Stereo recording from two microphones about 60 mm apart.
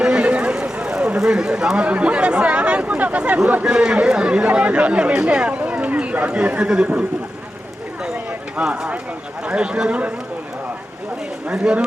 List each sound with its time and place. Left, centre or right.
0.0 s speech: centre
8.0 s a sound: right
9.4 s a man's voice: centre
11.5 s a man's voice: centre